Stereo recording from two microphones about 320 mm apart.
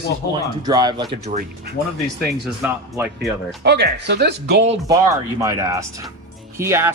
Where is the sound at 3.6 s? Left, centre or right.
Right.